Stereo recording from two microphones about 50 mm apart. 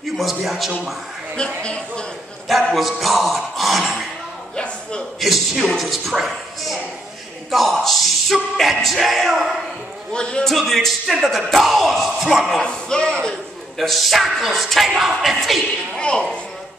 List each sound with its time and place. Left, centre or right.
0.2 s speech: centre
1.6 s speech: left
2.4 s a sound: centre
4.6 s a sound: centre
5.2 s a woman's voice: centre
10.4 s speech: centre
12.5 s speech: centre
13.7 s speech: centre
16.0 s speech: centre